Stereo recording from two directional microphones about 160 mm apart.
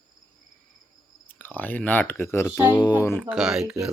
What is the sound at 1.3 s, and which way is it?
Speech, 10° left (ahead or behind).